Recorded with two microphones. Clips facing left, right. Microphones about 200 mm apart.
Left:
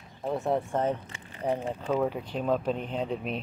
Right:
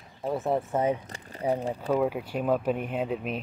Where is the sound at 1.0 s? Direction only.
40° right (ahead or behind).